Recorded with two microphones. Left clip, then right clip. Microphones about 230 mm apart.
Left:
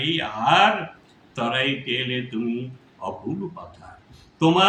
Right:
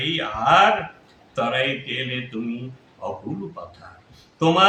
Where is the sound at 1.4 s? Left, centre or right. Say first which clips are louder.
Right 1 dB; centre.